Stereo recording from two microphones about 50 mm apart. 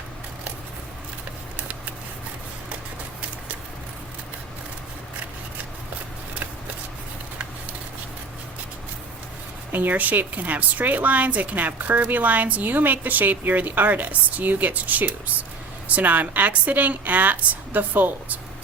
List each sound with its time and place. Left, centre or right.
9.7 s a woman's voice: right